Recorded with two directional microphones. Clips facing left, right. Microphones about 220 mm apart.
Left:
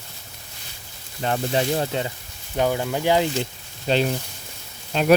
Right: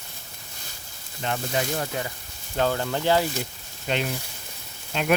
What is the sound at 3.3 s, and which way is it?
Speech, 30° left (ahead or behind).